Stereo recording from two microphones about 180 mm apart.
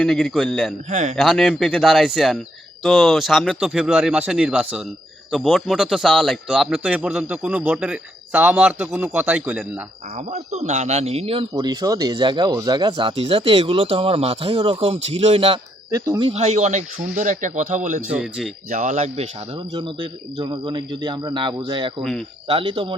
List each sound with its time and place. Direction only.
0.0 s speech: centre (ahead or behind)
0.9 s speech: 40° right (ahead or behind)
1.1 s speech: centre (ahead or behind)
10.2 s speech: 40° right (ahead or behind)
11.5 s speech: 20° right (ahead or behind)
15.9 s speech: 20° right (ahead or behind)
16.3 s speech: 40° right (ahead or behind)
18.1 s speech: 5° right (ahead or behind)
18.7 s speech: 40° right (ahead or behind)